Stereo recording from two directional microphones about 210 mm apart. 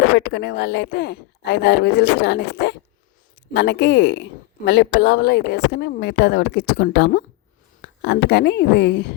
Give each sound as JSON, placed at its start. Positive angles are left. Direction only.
{"t": 0.2, "sound": "a woman's voice", "side_deg": 50}